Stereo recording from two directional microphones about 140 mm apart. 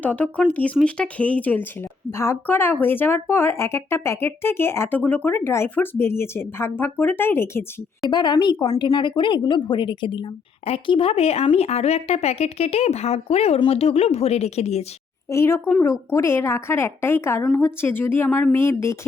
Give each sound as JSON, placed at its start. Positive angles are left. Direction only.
{"t": 0.0, "sound": "speech", "side_deg": 10}
{"t": 8.1, "sound": "a woman's voice", "side_deg": 30}
{"t": 15.3, "sound": "speech", "side_deg": 20}